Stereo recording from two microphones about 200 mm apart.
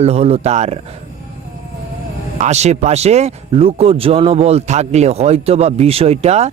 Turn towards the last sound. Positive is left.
turn(degrees=-35)  # may be behind; listen again after turning